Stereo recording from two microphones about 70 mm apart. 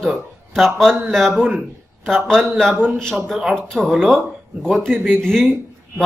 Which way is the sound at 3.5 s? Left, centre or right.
Centre.